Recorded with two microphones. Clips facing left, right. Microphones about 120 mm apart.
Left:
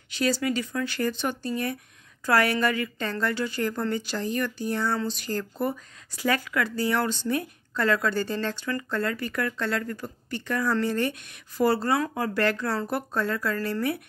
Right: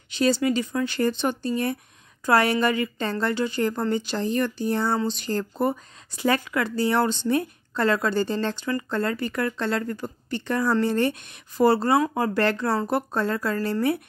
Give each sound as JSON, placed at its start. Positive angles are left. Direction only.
{"t": 0.1, "sound": "a woman's voice", "side_deg": -25}